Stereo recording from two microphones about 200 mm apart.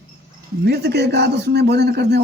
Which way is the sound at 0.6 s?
50° right (ahead or behind).